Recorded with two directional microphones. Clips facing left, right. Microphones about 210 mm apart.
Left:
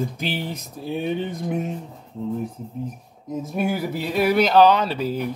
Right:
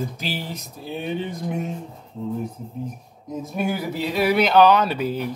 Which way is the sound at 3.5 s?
50° left (ahead or behind).